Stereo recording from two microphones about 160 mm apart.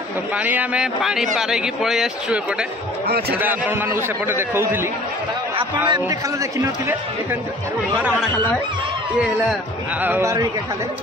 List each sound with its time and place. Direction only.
0.4 s speech: 10° right (ahead or behind)
3.1 s a man's voice: 75° right (ahead or behind)
3.3 s a man's voice: 10° right (ahead or behind)
5.9 s a man's voice: 25° right (ahead or behind)
10.0 s a man's voice: 15° right (ahead or behind)